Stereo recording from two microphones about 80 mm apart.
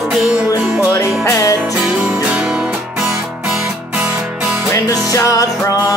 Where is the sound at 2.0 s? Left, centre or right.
Centre.